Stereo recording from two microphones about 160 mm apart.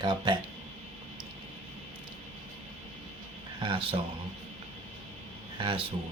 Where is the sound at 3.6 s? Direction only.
30° right (ahead or behind).